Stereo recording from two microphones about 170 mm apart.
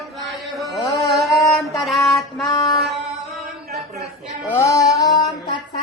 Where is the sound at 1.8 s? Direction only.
Centre (ahead or behind).